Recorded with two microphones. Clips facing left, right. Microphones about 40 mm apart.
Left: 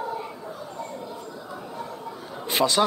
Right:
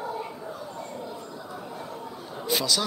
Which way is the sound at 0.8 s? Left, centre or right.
Left.